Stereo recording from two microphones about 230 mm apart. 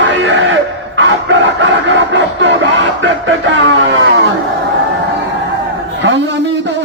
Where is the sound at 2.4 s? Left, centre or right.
Right.